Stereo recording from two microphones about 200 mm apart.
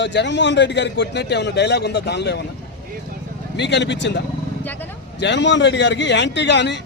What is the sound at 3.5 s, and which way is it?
A man's voice, 60° left (ahead or behind).